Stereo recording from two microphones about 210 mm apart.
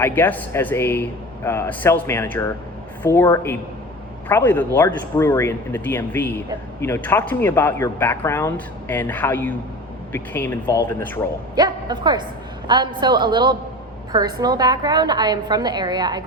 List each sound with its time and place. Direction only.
0.0 s speech: 10° left (ahead or behind)
11.5 s a man's voice: 20° right (ahead or behind)